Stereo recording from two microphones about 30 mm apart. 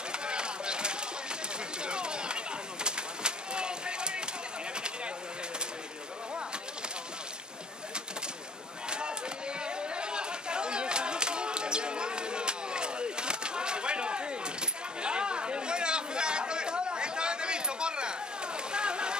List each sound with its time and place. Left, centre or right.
0.1 s chop: right
1.8 s a sound: right
8.8 s chop: right
9.6 s chatter: right